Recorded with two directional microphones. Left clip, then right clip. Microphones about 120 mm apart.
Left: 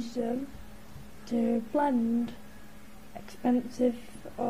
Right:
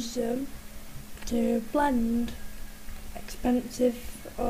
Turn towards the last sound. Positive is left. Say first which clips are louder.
# right 1 dB
turn(degrees=-5)  # may be behind; listen again after turning